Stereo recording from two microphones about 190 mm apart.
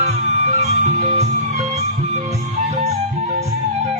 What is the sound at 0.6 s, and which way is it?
Music, 35° right (ahead or behind).